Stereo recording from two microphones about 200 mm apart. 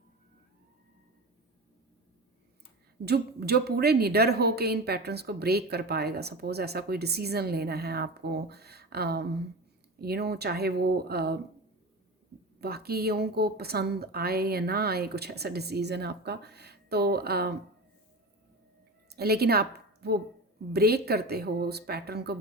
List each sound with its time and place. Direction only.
3.0 s a woman's voice: 55° right (ahead or behind)
12.5 s a woman's voice: 50° right (ahead or behind)
19.0 s a woman's voice: 50° right (ahead or behind)